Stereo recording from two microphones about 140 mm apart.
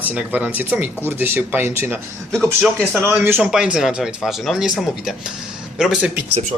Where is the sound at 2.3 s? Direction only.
5° left (ahead or behind).